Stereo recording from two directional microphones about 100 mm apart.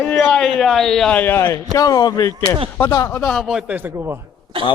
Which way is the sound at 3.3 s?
Centre (ahead or behind).